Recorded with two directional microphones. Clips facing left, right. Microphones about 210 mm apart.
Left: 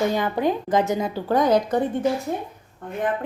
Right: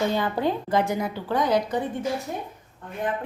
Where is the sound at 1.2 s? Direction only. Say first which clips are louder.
Left 5 dB; 45° left (ahead or behind).